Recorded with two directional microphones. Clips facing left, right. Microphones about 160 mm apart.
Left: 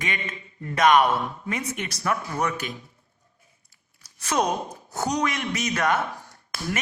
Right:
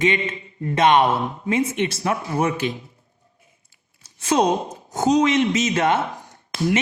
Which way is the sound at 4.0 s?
25° right (ahead or behind).